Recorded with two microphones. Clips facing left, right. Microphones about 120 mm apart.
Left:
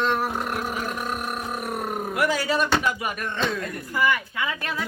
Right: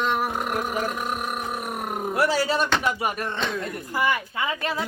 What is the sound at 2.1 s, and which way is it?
Speech, 30° right (ahead or behind).